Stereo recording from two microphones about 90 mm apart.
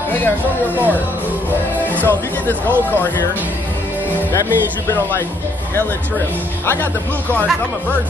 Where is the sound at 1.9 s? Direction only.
20° left (ahead or behind).